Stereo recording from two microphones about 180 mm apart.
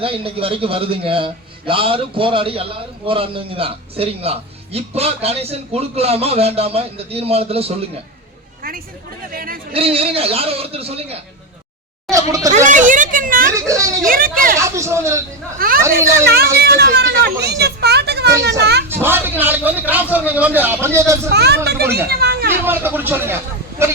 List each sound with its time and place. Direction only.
0.0 s a man's voice: 30° right (ahead or behind)
9.3 s speech: 55° right (ahead or behind)
9.7 s a man's voice: 30° right (ahead or behind)
12.5 s a child's voice: 45° right (ahead or behind)
13.5 s a man's voice: 15° right (ahead or behind)
14.1 s speech: 50° right (ahead or behind)
14.6 s a man's voice: 15° right (ahead or behind)
15.5 s speech: 55° right (ahead or behind)
16.0 s a man's voice: 15° right (ahead or behind)
16.2 s a child's voice: 60° right (ahead or behind)
18.9 s a man's voice: 10° right (ahead or behind)
21.3 s a child's voice: 65° right (ahead or behind)
22.6 s a man's voice: 10° right (ahead or behind)